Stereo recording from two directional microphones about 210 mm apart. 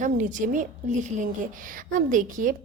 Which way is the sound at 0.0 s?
35° right (ahead or behind).